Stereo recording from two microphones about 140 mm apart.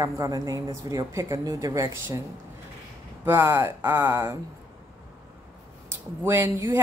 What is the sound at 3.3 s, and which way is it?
Speech, 20° right (ahead or behind).